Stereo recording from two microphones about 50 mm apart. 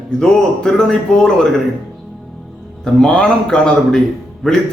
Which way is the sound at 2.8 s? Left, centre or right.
Centre.